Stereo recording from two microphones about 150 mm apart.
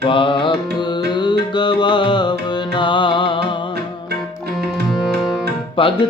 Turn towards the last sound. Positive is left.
turn(degrees=35)  # may be behind; listen again after turning